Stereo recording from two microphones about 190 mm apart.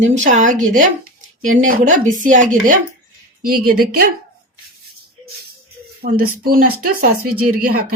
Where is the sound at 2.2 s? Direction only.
40° right (ahead or behind).